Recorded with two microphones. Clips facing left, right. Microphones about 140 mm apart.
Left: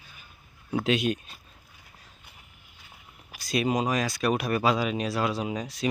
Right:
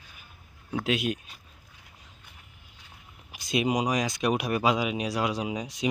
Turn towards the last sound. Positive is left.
turn(degrees=-15)  # may be behind; listen again after turning